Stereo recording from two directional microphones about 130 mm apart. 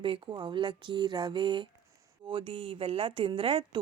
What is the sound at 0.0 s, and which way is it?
A woman's voice, 40° right (ahead or behind).